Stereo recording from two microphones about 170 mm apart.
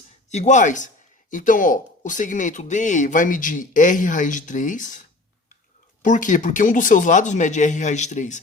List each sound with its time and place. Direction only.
0.3 s speech: 45° left (ahead or behind)
6.0 s speech: 50° left (ahead or behind)